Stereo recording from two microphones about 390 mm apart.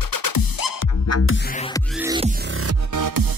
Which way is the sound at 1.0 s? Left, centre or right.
Left.